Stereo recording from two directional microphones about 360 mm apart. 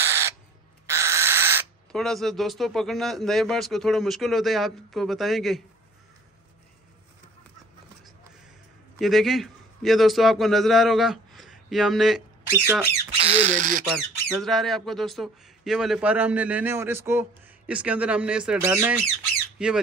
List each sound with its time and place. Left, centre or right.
0.0 s crow: centre
0.8 s speech: centre
8.9 s a man's voice: centre
13.3 s speech: centre
13.9 s speech: centre